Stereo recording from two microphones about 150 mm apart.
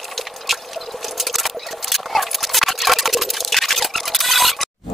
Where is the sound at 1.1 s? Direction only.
Centre (ahead or behind).